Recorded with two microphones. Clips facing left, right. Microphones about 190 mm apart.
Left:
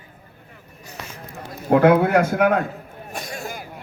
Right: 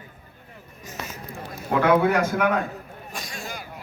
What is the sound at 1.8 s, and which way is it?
Speech, 55° left (ahead or behind).